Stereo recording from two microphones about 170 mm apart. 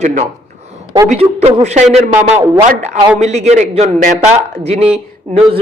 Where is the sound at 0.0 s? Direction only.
50° right (ahead or behind).